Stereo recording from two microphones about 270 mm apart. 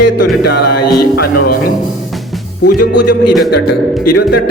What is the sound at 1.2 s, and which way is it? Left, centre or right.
Music, left.